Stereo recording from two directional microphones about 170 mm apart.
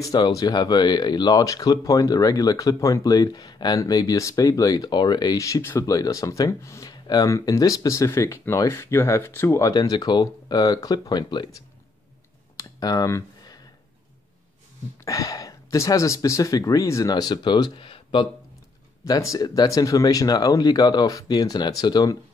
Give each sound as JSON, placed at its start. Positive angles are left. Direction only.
{"t": 0.0, "sound": "speech", "side_deg": 20}
{"t": 12.5, "sound": "a sound", "side_deg": 20}
{"t": 15.0, "sound": "speech", "side_deg": 20}